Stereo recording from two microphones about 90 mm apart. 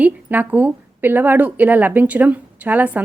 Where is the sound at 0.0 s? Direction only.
20° right (ahead or behind).